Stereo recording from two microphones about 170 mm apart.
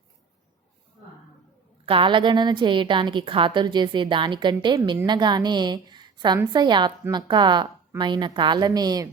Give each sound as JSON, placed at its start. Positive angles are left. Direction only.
{"t": 1.9, "sound": "a woman's voice", "side_deg": -30}